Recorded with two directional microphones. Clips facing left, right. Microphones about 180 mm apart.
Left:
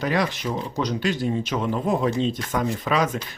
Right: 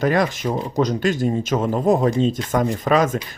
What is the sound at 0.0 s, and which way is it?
Speech, 50° right (ahead or behind).